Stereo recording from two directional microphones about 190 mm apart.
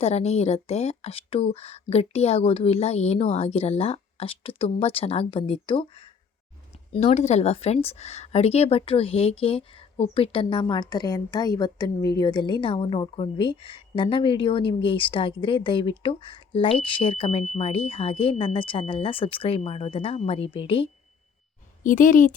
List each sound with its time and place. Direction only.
0.0 s speech: 35° left (ahead or behind)
6.9 s speech: 35° left (ahead or behind)
21.8 s speech: 45° left (ahead or behind)